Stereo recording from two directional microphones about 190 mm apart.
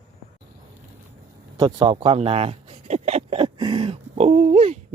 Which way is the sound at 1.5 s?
25° right (ahead or behind).